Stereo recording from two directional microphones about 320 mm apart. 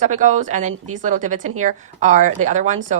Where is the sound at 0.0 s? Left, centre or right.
Right.